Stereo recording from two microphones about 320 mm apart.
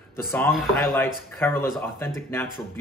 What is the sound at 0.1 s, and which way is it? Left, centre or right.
Speech, centre.